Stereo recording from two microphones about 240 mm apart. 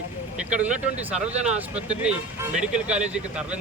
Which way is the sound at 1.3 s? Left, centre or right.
Right.